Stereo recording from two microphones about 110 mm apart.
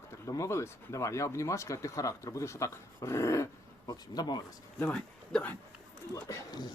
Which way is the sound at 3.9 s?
40° left (ahead or behind).